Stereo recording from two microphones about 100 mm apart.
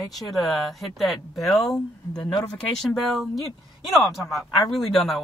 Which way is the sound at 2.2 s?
55° left (ahead or behind).